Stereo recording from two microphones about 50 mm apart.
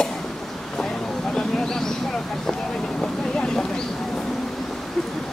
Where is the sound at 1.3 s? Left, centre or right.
Centre.